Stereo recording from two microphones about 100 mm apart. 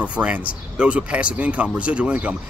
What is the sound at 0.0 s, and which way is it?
Speech, 15° right (ahead or behind).